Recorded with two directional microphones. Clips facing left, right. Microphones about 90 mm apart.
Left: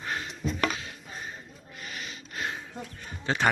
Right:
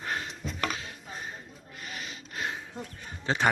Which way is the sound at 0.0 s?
35° right (ahead or behind).